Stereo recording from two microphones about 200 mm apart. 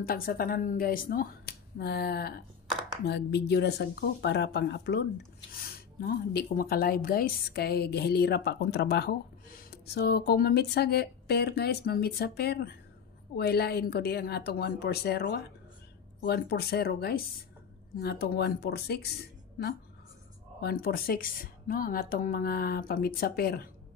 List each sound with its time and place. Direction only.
0.0 s speech: 50° left (ahead or behind)
20.6 s speech: 50° left (ahead or behind)